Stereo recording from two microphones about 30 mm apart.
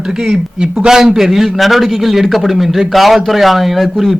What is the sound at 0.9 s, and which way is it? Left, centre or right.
Speech, centre.